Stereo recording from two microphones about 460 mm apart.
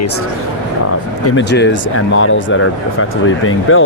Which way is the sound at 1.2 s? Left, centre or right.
Left.